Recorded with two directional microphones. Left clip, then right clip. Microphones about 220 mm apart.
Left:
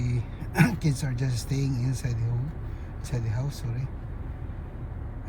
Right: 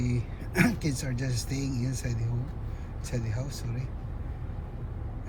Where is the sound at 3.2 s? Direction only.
15° left (ahead or behind).